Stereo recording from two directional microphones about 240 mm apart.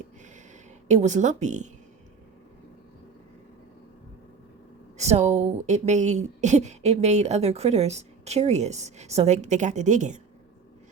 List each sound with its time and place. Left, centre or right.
0.9 s speech: right
4.9 s speech: right